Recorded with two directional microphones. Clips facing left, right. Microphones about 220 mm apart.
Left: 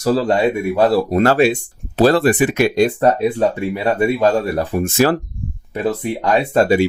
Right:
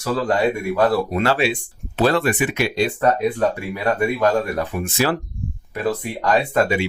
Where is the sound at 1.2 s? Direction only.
45° left (ahead or behind).